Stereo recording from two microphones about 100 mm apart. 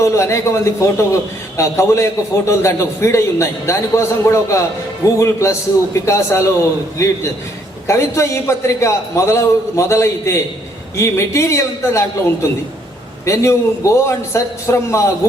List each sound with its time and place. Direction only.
0.0 s a man's voice: 30° left (ahead or behind)